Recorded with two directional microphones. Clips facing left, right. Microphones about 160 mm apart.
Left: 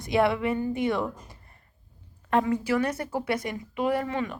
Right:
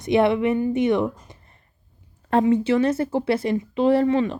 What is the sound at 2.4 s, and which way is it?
Speech, 25° right (ahead or behind).